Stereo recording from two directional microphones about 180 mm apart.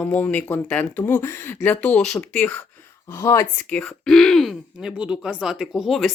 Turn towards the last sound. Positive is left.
turn(degrees=0)  # may be behind; listen again after turning